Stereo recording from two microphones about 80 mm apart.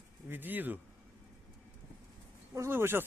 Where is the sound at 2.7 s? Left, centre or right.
Right.